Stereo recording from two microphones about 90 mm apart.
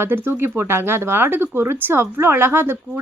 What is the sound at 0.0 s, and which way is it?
Speech, 25° right (ahead or behind).